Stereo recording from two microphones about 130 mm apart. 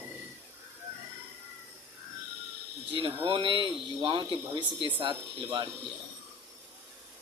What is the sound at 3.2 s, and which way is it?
Speech, 40° right (ahead or behind).